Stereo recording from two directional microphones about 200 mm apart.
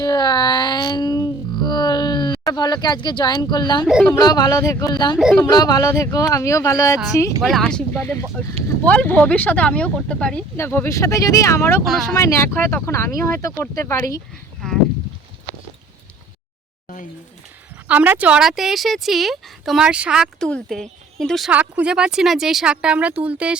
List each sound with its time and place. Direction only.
0.0 s music: 20° left (ahead or behind)
3.8 s speech: centre (ahead or behind)
4.1 s speech: 20° left (ahead or behind)
5.1 s speech: centre (ahead or behind)
5.5 s speech: 20° left (ahead or behind)
7.4 s speech: centre (ahead or behind)
17.8 s speech: 10° right (ahead or behind)